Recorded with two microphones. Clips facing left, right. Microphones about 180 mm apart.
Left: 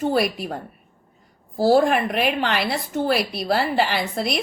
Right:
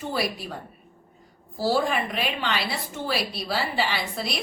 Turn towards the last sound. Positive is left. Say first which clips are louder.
# left 6 dB
turn(degrees=55)  # may be behind; listen again after turning